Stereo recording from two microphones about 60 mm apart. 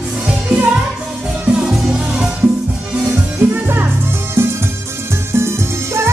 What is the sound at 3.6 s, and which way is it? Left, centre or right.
Music, right.